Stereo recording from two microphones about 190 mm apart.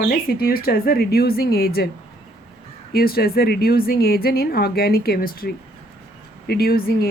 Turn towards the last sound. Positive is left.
turn(degrees=50)  # may be behind; listen again after turning